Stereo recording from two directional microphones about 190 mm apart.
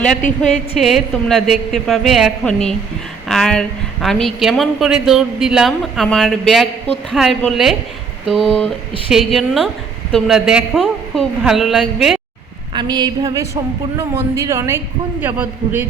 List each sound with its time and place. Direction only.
0.3 s a woman's voice: 5° left (ahead or behind)
12.7 s a sound: 20° right (ahead or behind)
14.3 s a man's voice: 15° right (ahead or behind)